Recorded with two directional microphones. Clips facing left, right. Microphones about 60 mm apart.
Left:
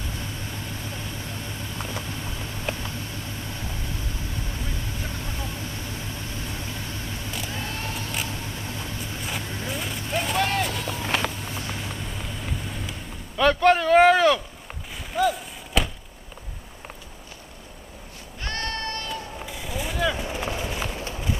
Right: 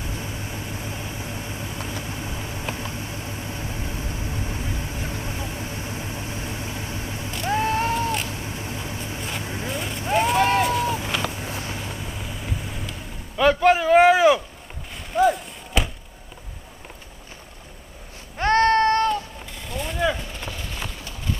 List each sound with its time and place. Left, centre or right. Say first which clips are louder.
0.0 s vehicle: right 2 dB; centre
7.5 s vehicle: right 10 dB; right
8.3 s vehicle: right 2 dB; centre
9.7 s vehicle: right 6 dB; centre
10.7 s run: right 8 dB; right
11.7 s vehicle: right 1 dB; centre
13.4 s a sound: right 1 dB; centre
15.0 s chop: right 4 dB; centre
18.4 s a sound: right 14 dB; right
19.5 s a sound: right 1 dB; centre
20.2 s vehicle: left 5 dB; centre
20.5 s horse: left 5 dB; centre